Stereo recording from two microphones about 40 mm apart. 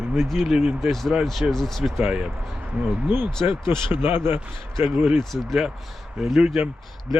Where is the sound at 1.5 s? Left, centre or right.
Centre.